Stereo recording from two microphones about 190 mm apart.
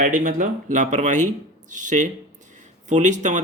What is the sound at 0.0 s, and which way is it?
Speech, 45° right (ahead or behind).